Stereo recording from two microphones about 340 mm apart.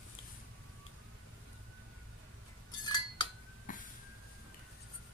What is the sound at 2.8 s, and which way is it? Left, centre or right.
Cutlery, centre.